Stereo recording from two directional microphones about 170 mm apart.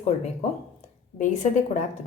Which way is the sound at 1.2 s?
45° left (ahead or behind).